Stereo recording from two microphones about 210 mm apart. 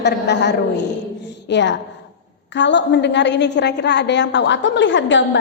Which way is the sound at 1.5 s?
55° left (ahead or behind).